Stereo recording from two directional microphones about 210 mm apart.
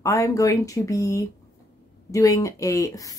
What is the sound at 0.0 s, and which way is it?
Speech, 15° left (ahead or behind).